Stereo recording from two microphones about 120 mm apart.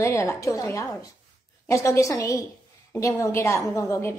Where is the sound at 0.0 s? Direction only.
25° left (ahead or behind).